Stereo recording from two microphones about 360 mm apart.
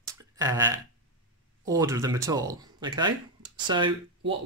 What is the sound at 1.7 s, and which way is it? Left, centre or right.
Speech, centre.